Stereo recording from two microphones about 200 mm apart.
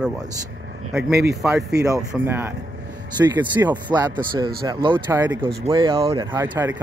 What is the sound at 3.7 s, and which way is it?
Speech, 20° right (ahead or behind).